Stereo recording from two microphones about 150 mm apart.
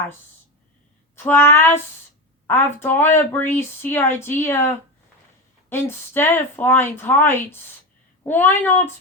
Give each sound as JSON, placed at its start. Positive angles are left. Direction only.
{"t": 1.1, "sound": "speech", "side_deg": 15}
{"t": 5.6, "sound": "speech", "side_deg": 15}